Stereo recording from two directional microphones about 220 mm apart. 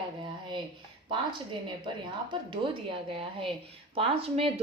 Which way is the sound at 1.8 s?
20° right (ahead or behind).